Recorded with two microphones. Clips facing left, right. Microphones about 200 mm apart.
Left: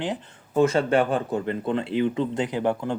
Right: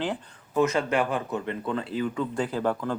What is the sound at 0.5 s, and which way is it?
Speech, 30° left (ahead or behind).